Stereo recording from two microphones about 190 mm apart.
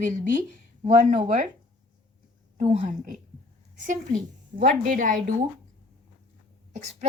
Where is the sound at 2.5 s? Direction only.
35° right (ahead or behind).